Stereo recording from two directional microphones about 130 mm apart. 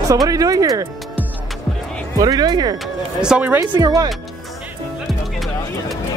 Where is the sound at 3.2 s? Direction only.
10° right (ahead or behind).